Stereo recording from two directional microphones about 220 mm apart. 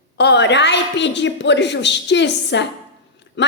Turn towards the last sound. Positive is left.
turn(degrees=55)  # may be behind; listen again after turning